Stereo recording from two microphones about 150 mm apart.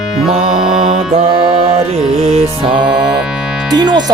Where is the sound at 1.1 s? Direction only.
40° right (ahead or behind).